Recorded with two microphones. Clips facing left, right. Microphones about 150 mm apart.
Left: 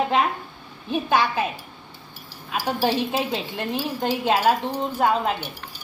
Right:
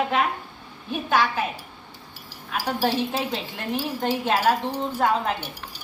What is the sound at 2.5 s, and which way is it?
Speech, 15° left (ahead or behind).